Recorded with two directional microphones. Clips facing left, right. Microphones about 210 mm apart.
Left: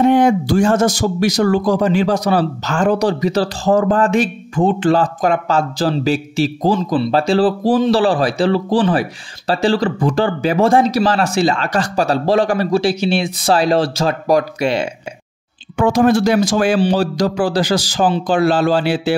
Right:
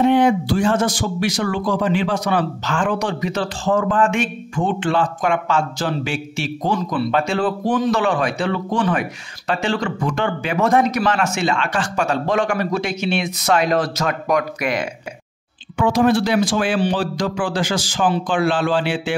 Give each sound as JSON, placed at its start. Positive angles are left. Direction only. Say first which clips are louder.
{"t": 0.0, "sound": "speech", "louder": "left 3 dB", "side_deg": 45}
{"t": 15.8, "sound": "speech", "louder": "left 3 dB", "side_deg": 45}